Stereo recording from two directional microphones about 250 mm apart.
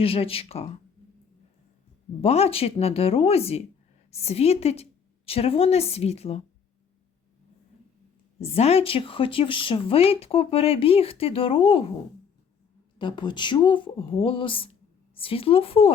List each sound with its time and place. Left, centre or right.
0.0 s speech: left
2.2 s speech: left
8.4 s speech: left
13.0 s speech: centre